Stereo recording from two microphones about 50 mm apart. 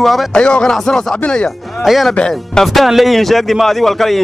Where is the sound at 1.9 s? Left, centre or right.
Centre.